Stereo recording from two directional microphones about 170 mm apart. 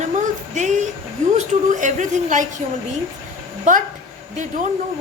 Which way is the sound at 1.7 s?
45° right (ahead or behind).